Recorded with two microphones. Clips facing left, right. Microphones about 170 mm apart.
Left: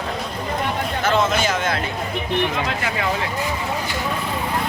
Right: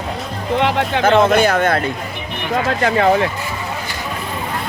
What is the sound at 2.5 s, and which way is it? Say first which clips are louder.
Speech: right 7 dB; 45° right (ahead or behind).